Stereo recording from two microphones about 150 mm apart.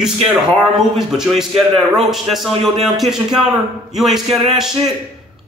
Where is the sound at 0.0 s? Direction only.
5° right (ahead or behind).